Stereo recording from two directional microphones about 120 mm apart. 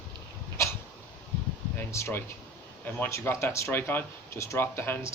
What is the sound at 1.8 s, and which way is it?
Speech, 25° left (ahead or behind).